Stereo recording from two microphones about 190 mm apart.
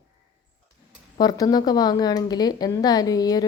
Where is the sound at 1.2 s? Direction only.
20° left (ahead or behind).